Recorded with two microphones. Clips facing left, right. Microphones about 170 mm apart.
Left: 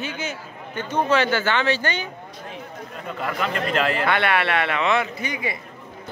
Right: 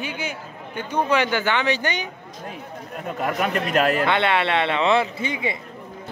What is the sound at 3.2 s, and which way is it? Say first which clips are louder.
Speech: right 2 dB; 45° right (ahead or behind).